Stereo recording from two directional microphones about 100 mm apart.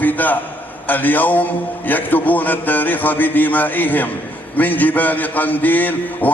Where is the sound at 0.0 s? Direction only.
15° left (ahead or behind).